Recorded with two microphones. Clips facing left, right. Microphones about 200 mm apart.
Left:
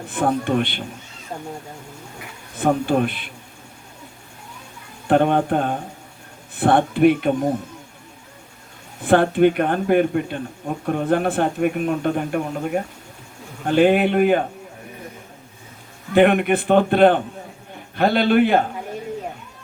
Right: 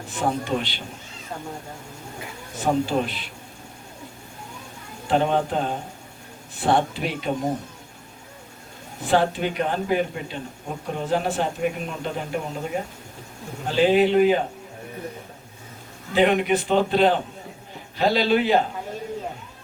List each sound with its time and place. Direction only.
0.1 s a man's voice: 55° left (ahead or behind)
2.6 s a man's voice: 55° left (ahead or behind)
5.0 s a man's voice: 55° left (ahead or behind)
9.0 s a man's voice: 55° left (ahead or behind)
16.1 s a man's voice: 55° left (ahead or behind)